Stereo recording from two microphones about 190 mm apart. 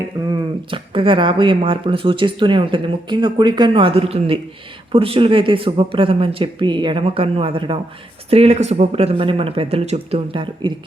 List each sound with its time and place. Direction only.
0.3 s speech: 25° right (ahead or behind)